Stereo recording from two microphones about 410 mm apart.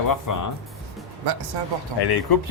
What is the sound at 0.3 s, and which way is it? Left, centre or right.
Speech, left.